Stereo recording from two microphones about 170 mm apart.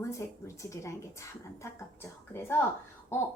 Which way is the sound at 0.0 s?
15° left (ahead or behind).